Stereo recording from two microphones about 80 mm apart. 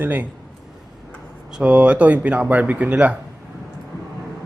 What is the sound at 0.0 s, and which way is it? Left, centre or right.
Speech, right.